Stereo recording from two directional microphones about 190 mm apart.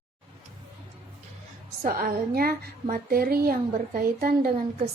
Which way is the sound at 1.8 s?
50° right (ahead or behind).